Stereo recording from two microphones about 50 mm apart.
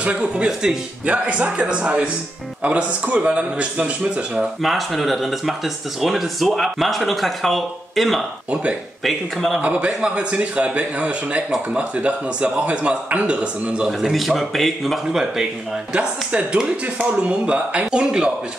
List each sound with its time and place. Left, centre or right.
0.0 s a man's voice: right
0.5 s speech: centre
1.0 s a man's voice: right
4.6 s speech: centre
9.6 s a man's voice: right
14.1 s speech: centre
15.0 s speech: centre
15.9 s a man's voice: right